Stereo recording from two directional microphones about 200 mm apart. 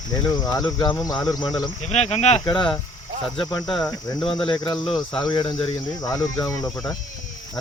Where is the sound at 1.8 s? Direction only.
35° left (ahead or behind).